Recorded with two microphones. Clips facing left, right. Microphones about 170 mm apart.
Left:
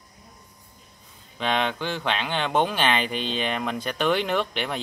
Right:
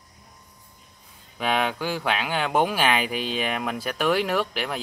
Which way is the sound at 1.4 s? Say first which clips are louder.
Right 1 dB; 5° right (ahead or behind).